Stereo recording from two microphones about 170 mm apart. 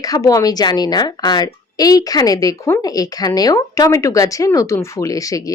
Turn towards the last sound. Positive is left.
turn(degrees=20)  # may be behind; listen again after turning